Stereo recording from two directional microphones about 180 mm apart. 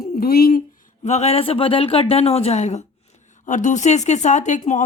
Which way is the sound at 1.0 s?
35° left (ahead or behind).